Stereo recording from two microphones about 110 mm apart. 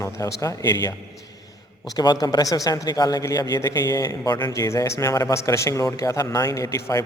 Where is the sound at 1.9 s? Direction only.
35° left (ahead or behind).